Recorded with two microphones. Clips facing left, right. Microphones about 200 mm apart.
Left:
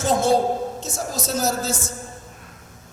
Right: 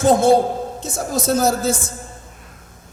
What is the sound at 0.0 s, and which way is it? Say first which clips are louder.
Speech: right 5 dB; 55° right (ahead or behind).